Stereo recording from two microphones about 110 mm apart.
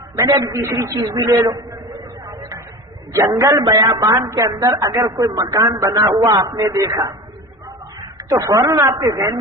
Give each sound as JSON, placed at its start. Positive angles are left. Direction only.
{"t": 0.3, "sound": "a man's voice", "side_deg": -30}
{"t": 3.1, "sound": "a man's voice", "side_deg": -30}
{"t": 8.3, "sound": "a man's voice", "side_deg": -30}